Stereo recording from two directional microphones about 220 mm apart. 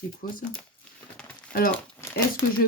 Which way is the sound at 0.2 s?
40° left (ahead or behind).